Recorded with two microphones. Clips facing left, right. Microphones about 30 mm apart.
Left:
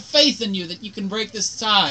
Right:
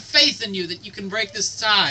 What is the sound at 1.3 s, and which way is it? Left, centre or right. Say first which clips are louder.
Speech: even; right.